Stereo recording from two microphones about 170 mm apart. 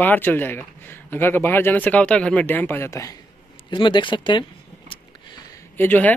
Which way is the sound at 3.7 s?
30° left (ahead or behind).